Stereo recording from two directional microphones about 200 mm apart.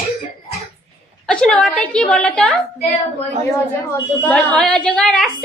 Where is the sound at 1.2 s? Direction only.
5° left (ahead or behind).